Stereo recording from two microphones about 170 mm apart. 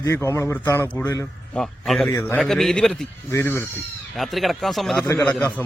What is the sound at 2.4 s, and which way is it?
Speech, centre (ahead or behind).